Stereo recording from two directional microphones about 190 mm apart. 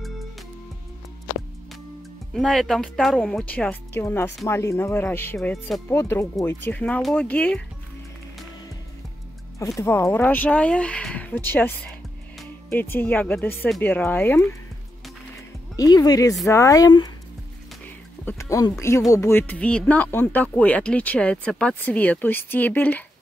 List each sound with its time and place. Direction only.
2.3 s a woman's voice: centre (ahead or behind)
9.8 s speech: 15° left (ahead or behind)
15.7 s speech: 20° left (ahead or behind)
18.2 s speech: 15° left (ahead or behind)